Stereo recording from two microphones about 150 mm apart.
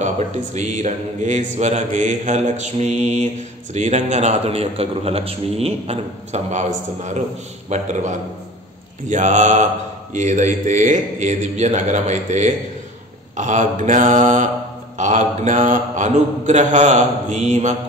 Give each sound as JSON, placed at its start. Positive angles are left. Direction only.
{"t": 0.6, "sound": "a man's voice", "side_deg": -50}
{"t": 9.1, "sound": "mantra", "side_deg": -55}
{"t": 10.1, "sound": "a man's voice", "side_deg": -55}
{"t": 13.4, "sound": "mantra", "side_deg": -55}
{"t": 15.0, "sound": "a man's voice", "side_deg": -50}